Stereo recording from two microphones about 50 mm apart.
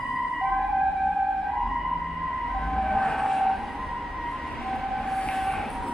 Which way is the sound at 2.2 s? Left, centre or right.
Centre.